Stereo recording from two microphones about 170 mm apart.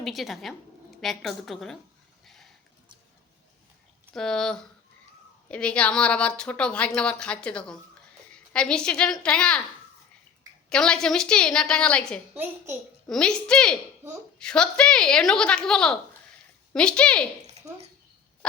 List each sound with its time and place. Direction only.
0.0 s a woman's voice: centre (ahead or behind)
2.2 s a sound: centre (ahead or behind)
4.1 s a woman's voice: 5° left (ahead or behind)
10.7 s a woman's voice: 5° left (ahead or behind)
12.3 s a woman's voice: 10° right (ahead or behind)
13.1 s a woman's voice: 5° left (ahead or behind)